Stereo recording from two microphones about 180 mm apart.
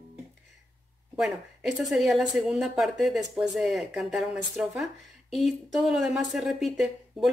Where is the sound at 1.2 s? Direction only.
Centre (ahead or behind).